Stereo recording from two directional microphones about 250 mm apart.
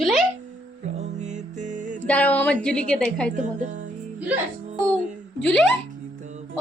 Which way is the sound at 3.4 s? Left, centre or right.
Right.